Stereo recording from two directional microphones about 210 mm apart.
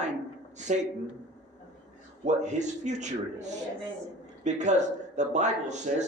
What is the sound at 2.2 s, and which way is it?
A man's voice, 35° right (ahead or behind).